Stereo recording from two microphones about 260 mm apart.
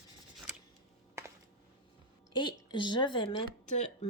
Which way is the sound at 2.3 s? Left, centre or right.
Centre.